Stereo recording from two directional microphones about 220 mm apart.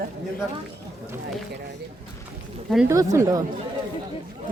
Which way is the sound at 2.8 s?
15° right (ahead or behind).